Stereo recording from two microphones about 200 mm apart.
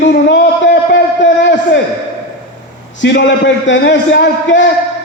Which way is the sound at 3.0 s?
60° left (ahead or behind).